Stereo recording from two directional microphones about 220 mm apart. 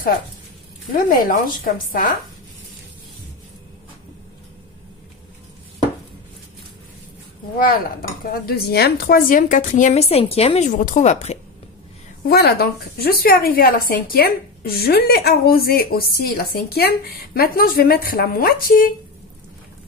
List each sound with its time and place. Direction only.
0.9 s a woman's voice: 40° left (ahead or behind)
8.3 s a woman's voice: 45° left (ahead or behind)
12.3 s speech: 45° left (ahead or behind)